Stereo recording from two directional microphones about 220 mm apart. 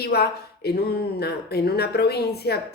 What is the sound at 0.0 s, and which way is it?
Speech, 45° left (ahead or behind).